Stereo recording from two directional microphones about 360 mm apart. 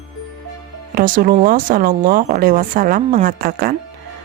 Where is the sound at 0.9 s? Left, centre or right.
Right.